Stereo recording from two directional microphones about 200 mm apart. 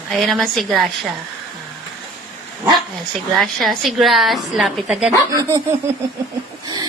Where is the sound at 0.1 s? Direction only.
Centre (ahead or behind).